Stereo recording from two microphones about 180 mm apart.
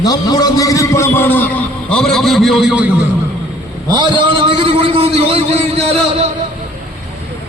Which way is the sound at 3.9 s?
25° right (ahead or behind).